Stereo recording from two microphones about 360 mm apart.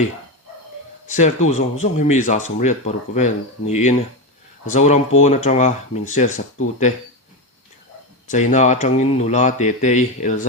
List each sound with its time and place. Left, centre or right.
1.0 s speech: left
8.3 s speech: centre